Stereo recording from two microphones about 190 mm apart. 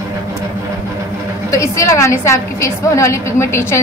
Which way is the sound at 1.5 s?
15° left (ahead or behind).